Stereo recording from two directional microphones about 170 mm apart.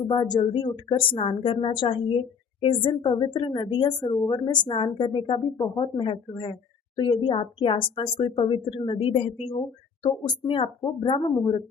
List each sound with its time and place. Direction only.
0.1 s a woman's voice: 25° left (ahead or behind)